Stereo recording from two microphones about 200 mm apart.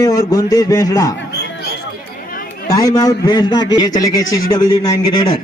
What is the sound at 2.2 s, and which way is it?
Chatter, 45° left (ahead or behind).